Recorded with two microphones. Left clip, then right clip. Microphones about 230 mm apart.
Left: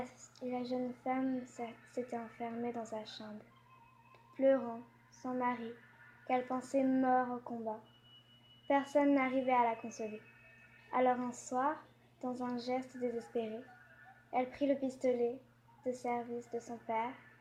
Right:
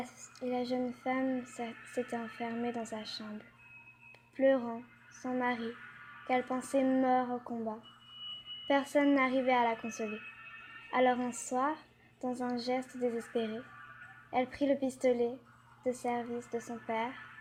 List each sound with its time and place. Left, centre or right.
0.0 s speech: right
4.4 s speech: right
8.6 s speech: right
10.9 s speech: right